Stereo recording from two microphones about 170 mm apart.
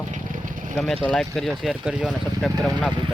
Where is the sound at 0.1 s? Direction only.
50° right (ahead or behind).